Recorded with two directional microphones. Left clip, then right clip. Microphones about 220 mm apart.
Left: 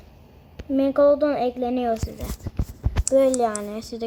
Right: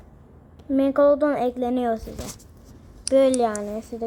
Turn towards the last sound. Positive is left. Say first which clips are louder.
# even
turn(degrees=15)  # may be behind; listen again after turning